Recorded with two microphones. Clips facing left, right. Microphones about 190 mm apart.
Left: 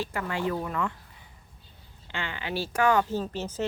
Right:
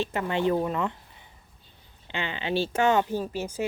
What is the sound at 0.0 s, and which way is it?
Speech, 25° right (ahead or behind).